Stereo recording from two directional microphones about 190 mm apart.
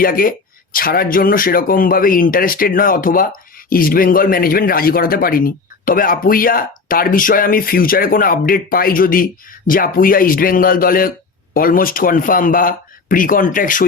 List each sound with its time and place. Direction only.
0.0 s speech: 50° left (ahead or behind)